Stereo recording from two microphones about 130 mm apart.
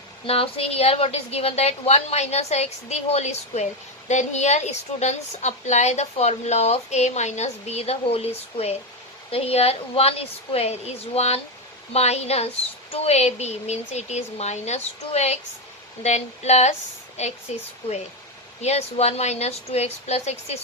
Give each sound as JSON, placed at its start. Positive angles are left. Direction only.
{"t": 0.3, "sound": "a woman's voice", "side_deg": 45}
{"t": 18.6, "sound": "a woman's voice", "side_deg": 55}